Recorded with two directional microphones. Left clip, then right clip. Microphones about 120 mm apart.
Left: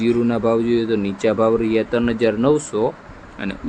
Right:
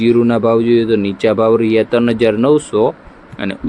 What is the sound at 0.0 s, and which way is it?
Speech, 45° right (ahead or behind).